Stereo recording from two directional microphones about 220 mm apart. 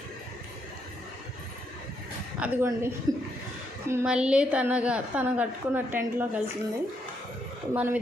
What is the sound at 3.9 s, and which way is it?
A woman's voice, 10° right (ahead or behind).